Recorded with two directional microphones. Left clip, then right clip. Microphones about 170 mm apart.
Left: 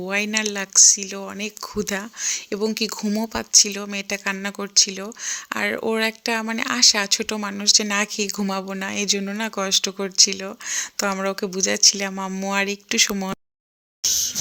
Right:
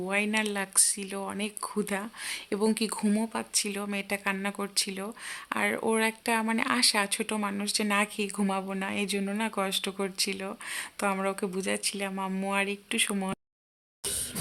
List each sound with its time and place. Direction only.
0.0 s speech: 25° left (ahead or behind)